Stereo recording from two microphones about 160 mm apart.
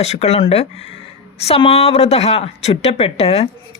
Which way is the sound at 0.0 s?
40° left (ahead or behind).